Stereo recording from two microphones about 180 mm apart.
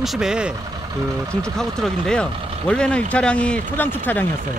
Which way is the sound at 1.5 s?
5° left (ahead or behind).